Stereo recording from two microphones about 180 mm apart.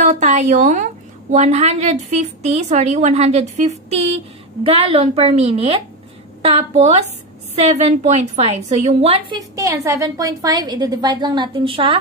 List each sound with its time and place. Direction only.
0.0 s a woman's voice: 40° right (ahead or behind)
9.4 s a woman's voice: 20° right (ahead or behind)